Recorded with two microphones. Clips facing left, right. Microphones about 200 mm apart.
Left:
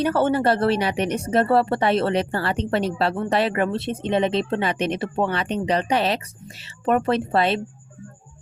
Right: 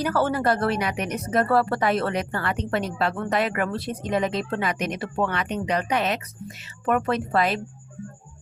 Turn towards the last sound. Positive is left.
turn(degrees=30)  # may be behind; listen again after turning